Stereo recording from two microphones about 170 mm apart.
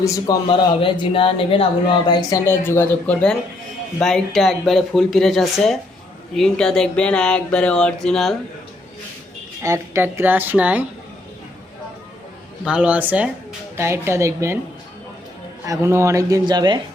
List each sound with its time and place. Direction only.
0.0 s speech: 25° left (ahead or behind)
2.5 s speech: 10° left (ahead or behind)
9.6 s a woman's voice: 15° right (ahead or behind)
12.6 s a woman's voice: 5° right (ahead or behind)
15.6 s a man's voice: 20° right (ahead or behind)